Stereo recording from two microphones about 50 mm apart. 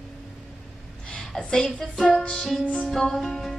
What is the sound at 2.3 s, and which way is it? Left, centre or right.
Music, centre.